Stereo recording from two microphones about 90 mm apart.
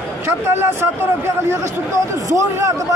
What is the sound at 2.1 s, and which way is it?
Speech, 40° right (ahead or behind).